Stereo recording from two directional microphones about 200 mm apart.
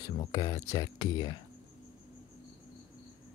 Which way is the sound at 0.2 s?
20° left (ahead or behind).